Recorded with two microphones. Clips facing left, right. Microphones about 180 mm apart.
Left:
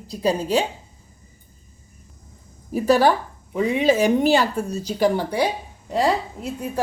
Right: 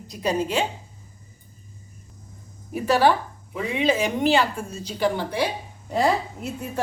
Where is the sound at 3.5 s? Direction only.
45° left (ahead or behind).